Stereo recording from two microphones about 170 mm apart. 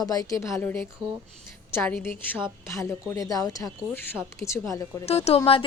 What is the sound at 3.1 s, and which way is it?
Speech, 20° left (ahead or behind).